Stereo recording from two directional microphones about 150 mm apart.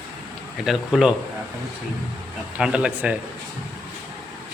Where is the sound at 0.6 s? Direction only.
Centre (ahead or behind).